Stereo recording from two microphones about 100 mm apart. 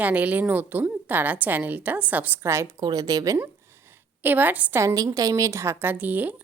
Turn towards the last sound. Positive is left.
turn(degrees=-15)  # may be behind; listen again after turning